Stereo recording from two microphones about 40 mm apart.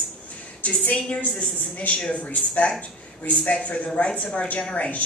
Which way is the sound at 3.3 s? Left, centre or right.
Left.